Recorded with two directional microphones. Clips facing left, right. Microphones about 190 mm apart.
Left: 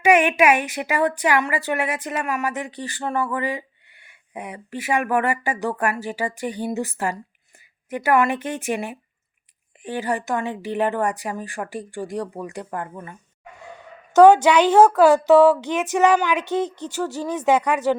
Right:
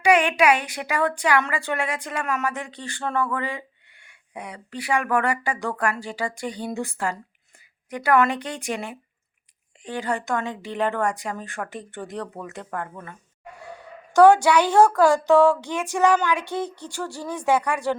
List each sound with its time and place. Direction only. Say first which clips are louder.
0.1 s a woman's voice: left 2 dB; 15° left (ahead or behind)
13.6 s dog: right 1 dB; 10° right (ahead or behind)
14.4 s a woman's voice: left 3 dB; 20° left (ahead or behind)
16.4 s a woman's voice: left 5 dB; 10° right (ahead or behind)
17.2 s speech: left 2 dB; 20° left (ahead or behind)